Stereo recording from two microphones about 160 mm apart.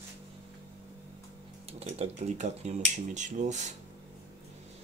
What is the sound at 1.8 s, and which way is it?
Speech, 45° right (ahead or behind).